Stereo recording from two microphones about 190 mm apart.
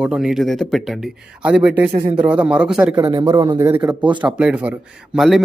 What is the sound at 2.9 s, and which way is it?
A man's voice, 25° right (ahead or behind).